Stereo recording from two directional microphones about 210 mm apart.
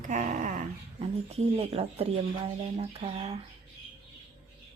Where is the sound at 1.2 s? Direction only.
30° right (ahead or behind).